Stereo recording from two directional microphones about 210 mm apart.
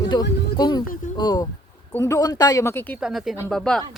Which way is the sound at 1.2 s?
20° left (ahead or behind).